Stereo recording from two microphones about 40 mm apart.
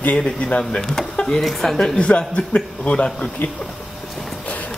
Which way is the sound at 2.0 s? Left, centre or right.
Left.